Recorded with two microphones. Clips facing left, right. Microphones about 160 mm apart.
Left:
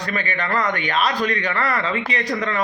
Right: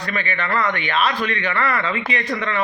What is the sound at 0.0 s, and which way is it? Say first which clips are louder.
A man's voice: even; 40° left (ahead or behind).